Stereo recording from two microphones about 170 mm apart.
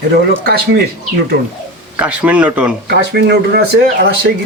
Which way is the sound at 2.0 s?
10° right (ahead or behind).